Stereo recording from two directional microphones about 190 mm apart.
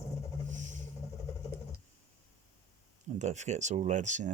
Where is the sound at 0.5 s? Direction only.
40° right (ahead or behind).